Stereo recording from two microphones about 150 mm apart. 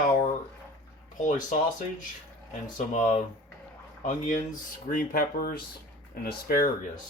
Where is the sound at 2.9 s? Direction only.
55° left (ahead or behind).